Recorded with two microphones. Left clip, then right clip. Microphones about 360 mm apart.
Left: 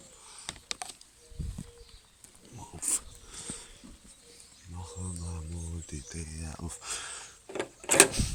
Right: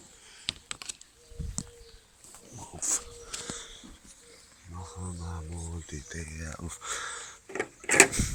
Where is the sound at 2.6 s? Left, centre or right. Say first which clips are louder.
Right 3 dB; centre.